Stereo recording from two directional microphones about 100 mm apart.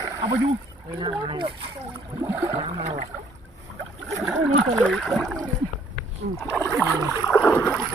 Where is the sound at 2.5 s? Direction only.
75° right (ahead or behind).